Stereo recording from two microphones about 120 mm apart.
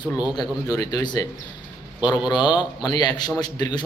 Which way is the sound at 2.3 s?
35° left (ahead or behind).